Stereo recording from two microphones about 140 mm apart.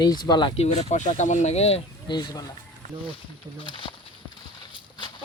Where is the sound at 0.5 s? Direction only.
50° left (ahead or behind).